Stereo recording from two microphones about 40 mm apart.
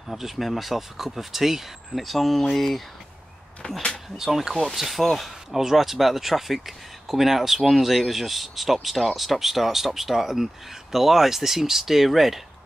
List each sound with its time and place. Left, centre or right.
0.1 s speech: centre
3.6 s speech: left
4.2 s speech: centre